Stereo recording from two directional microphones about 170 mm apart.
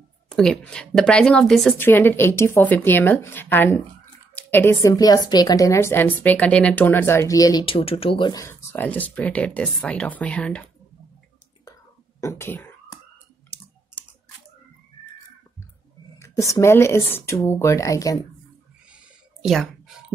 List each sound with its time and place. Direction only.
0.3 s a woman's voice: 5° left (ahead or behind); by 7.6 s 20° left (ahead or behind)
7.6 s a woman's voice: 35° left (ahead or behind); by 10.6 s 5° left (ahead or behind)
12.2 s whispering: 15° left (ahead or behind)
16.2 s a woman's voice: 20° left (ahead or behind)
19.4 s speech: centre (ahead or behind)